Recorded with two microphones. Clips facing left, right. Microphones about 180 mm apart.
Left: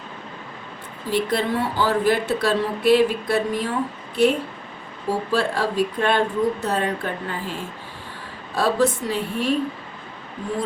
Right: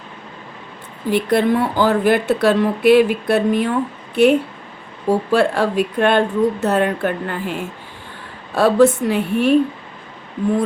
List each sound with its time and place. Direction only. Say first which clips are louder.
1.1 s speech: right 6 dB; 60° right (ahead or behind)